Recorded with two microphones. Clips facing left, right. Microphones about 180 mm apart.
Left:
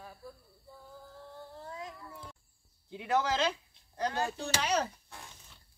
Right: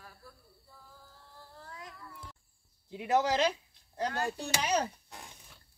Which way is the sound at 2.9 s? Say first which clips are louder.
Right 2 dB; 15° right (ahead or behind).